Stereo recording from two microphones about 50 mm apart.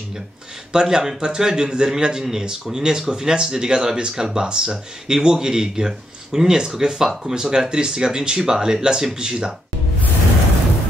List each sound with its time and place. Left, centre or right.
0.7 s a man's voice: centre